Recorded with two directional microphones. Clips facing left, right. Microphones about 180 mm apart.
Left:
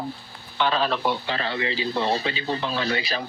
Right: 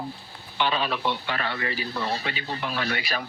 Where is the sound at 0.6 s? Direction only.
5° right (ahead or behind).